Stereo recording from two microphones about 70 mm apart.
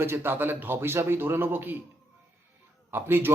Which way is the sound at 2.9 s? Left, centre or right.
Right.